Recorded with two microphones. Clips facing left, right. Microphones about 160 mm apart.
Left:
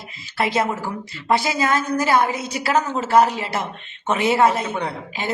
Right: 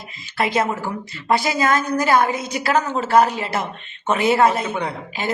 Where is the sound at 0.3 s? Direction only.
30° left (ahead or behind).